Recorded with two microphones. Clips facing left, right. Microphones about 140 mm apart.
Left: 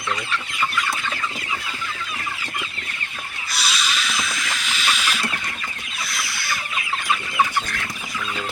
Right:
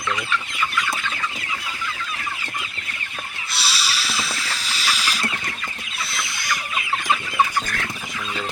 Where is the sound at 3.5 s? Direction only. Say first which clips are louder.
Left 2 dB; 30° right (ahead or behind).